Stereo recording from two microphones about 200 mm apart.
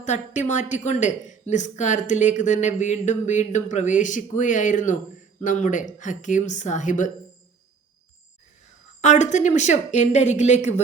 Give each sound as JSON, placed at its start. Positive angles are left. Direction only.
{"t": 0.0, "sound": "a woman's voice", "side_deg": 35}
{"t": 9.0, "sound": "a woman's voice", "side_deg": 35}